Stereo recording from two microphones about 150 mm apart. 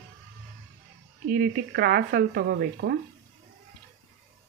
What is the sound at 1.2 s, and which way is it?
Speech, 70° right (ahead or behind).